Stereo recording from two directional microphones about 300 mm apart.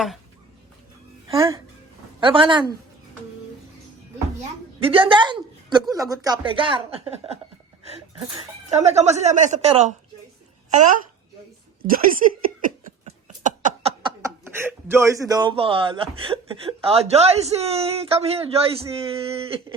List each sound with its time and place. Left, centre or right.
1.3 s speech: centre
4.8 s a woman's voice: centre
8.4 s speech: right
11.8 s speech: right
12.8 s a sound: right